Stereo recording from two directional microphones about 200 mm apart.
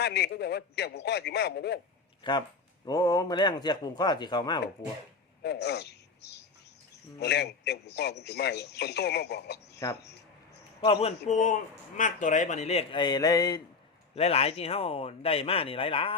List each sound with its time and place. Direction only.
0.0 s a man's voice: 55° left (ahead or behind)
2.2 s speech: 25° left (ahead or behind)
5.4 s a man's voice: 55° left (ahead or behind)
9.8 s speech: 20° left (ahead or behind)
10.8 s speech: 30° left (ahead or behind)
14.2 s speech: 30° left (ahead or behind)